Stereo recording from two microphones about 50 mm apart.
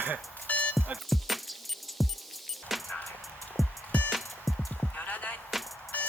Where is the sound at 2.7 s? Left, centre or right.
Centre.